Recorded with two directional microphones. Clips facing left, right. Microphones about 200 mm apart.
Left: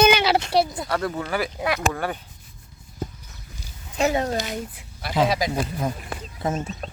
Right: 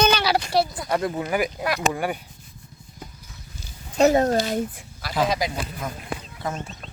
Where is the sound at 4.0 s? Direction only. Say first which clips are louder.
Right 5 dB; 45° right (ahead or behind).